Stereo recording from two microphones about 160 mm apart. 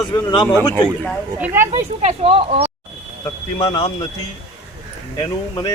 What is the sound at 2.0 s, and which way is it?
Speech, 40° right (ahead or behind).